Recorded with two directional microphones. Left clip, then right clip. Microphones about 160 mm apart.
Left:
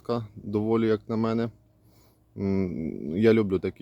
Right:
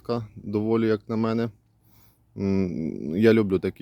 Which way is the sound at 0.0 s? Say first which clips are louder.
Right 1 dB; 20° right (ahead or behind).